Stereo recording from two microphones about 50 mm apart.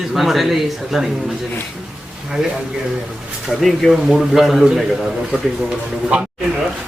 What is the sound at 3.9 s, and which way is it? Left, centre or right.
Speech, centre.